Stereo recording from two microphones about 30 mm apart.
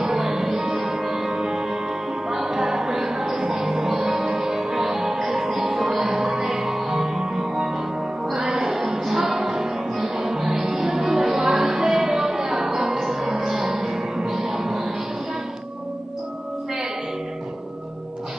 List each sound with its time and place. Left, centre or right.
0.1 s music: centre
11.0 s music: right